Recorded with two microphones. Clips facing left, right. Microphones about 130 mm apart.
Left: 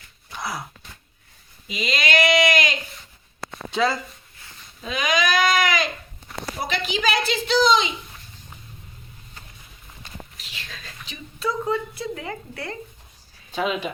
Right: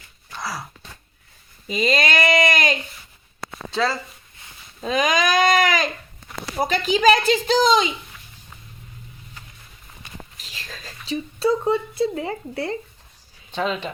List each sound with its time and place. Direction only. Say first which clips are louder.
0.3 s a sound: even; 20° left (ahead or behind)
1.6 s a woman's voice: right 5 dB; 40° right (ahead or behind)
3.7 s speech: left 1 dB; 20° left (ahead or behind)
4.8 s a woman's voice: right 3 dB; 40° right (ahead or behind)
10.3 s speech: right 1 dB; 40° right (ahead or behind)
13.5 s speech: even; 5° left (ahead or behind)